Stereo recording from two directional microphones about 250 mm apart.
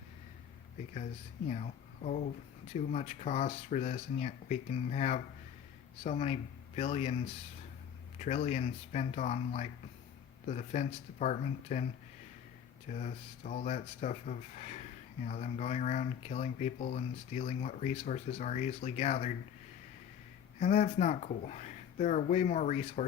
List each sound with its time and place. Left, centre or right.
1.5 s speech: left
8.2 s speech: left
12.9 s speech: left
20.6 s speech: left